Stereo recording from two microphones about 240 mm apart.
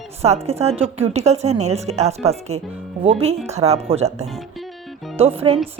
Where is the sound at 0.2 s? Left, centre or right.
Right.